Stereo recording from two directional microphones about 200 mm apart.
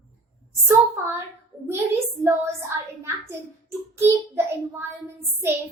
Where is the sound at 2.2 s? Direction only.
15° right (ahead or behind).